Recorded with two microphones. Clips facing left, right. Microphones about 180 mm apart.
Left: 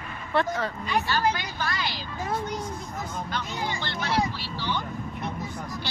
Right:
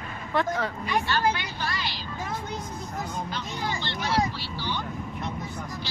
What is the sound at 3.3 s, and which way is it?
Speech, 60° left (ahead or behind).